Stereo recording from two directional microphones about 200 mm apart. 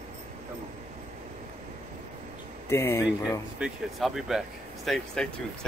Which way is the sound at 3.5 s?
5° right (ahead or behind).